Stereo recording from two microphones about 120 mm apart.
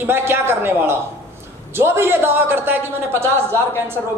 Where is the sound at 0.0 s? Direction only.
20° right (ahead or behind).